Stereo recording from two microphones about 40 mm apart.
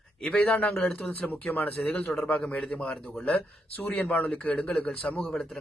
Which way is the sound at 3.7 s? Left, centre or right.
Left.